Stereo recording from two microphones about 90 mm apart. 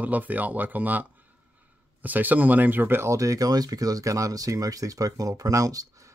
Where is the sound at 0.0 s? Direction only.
20° right (ahead or behind).